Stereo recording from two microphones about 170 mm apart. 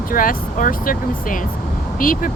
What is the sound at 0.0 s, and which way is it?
Speech, 55° left (ahead or behind).